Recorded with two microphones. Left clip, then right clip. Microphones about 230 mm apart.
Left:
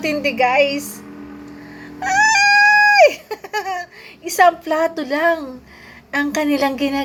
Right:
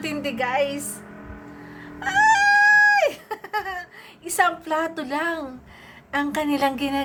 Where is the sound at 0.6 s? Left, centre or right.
Centre.